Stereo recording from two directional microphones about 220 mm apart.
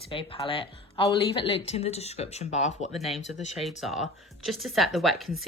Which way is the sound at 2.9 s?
Centre (ahead or behind).